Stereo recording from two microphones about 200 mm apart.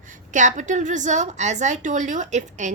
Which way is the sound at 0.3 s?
40° right (ahead or behind).